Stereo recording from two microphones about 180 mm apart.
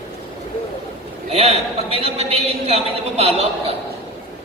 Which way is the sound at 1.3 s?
35° right (ahead or behind).